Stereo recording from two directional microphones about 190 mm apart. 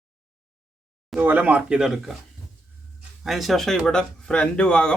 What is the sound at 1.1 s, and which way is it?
Speech, 10° right (ahead or behind).